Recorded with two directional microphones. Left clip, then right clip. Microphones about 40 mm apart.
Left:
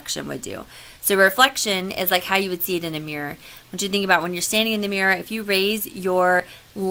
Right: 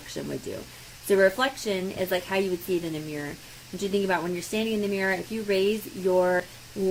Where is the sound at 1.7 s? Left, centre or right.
Left.